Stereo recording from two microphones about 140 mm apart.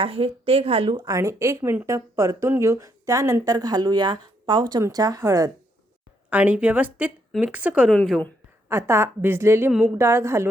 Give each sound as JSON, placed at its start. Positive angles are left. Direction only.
{"t": 0.0, "sound": "speech", "side_deg": -45}
{"t": 6.3, "sound": "a woman's voice", "side_deg": -10}
{"t": 7.9, "sound": "a woman's voice", "side_deg": 5}
{"t": 8.7, "sound": "a woman's voice", "side_deg": -20}